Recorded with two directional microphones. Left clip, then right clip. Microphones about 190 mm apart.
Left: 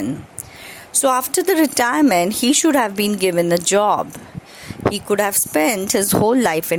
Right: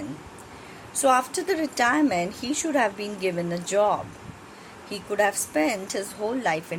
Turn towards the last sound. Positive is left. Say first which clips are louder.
# left 10 dB
turn(degrees=55)  # may be behind; listen again after turning